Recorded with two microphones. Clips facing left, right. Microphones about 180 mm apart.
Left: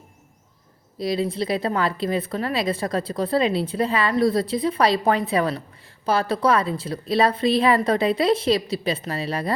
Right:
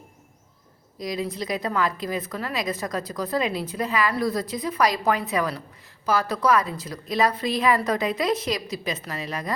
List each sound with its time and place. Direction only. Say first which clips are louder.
0.9 s a woman's voice: left 5 dB; 30° left (ahead or behind)